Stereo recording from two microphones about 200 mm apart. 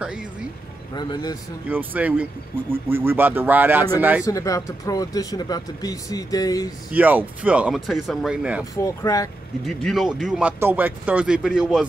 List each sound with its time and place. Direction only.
0.9 s a man's voice: 20° left (ahead or behind)
1.7 s speech: 10° right (ahead or behind)
4.2 s speech: 15° left (ahead or behind)
6.9 s speech: 10° right (ahead or behind)
8.7 s speech: 15° left (ahead or behind)
9.7 s speech: centre (ahead or behind)